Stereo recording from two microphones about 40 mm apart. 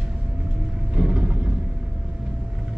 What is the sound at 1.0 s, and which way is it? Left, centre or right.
Vehicle, right.